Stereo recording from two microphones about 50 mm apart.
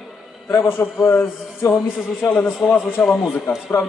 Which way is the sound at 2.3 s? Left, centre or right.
Left.